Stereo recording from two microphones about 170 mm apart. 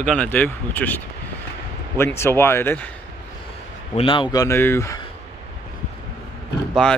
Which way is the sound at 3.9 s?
30° left (ahead or behind).